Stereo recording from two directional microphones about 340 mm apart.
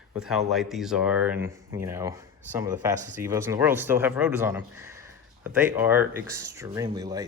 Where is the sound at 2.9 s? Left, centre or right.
Right.